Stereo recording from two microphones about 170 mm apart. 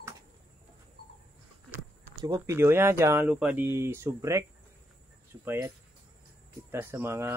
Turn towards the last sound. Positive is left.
turn(degrees=-15)  # may be behind; listen again after turning